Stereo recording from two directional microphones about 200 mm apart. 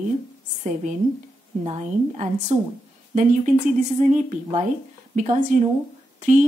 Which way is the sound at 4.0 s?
40° right (ahead or behind).